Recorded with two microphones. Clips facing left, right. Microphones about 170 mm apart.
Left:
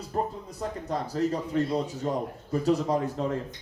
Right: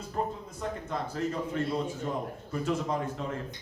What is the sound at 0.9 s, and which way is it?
A man's voice, 35° left (ahead or behind).